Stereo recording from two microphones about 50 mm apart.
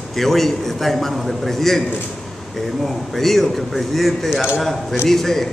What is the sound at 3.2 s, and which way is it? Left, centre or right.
A man's voice, centre.